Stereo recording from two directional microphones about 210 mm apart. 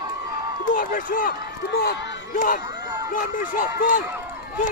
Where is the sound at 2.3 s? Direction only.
40° left (ahead or behind).